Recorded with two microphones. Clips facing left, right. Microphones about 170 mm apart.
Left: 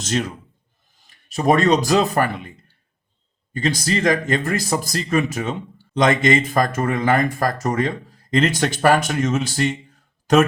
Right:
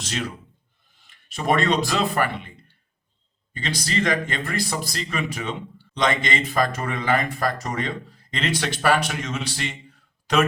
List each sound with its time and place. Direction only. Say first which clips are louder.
0.0 s speech: left 6 dB; 45° left (ahead or behind)